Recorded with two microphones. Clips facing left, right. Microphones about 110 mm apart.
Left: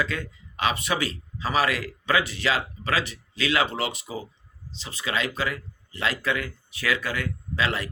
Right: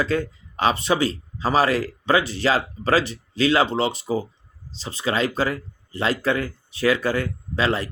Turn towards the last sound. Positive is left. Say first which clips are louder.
# right 5 dB
turn(degrees=-30)  # may be behind; listen again after turning